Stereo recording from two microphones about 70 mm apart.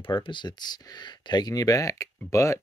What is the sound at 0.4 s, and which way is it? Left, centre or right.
Speech, left.